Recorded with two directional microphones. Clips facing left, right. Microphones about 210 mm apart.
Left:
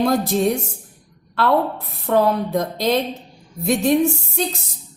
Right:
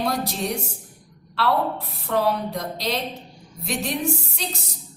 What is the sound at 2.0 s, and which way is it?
Speech, 50° left (ahead or behind).